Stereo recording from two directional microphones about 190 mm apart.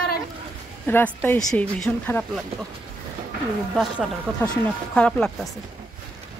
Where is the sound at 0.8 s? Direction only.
10° left (ahead or behind).